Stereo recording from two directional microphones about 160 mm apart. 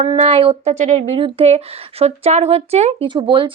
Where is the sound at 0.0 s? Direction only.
35° right (ahead or behind).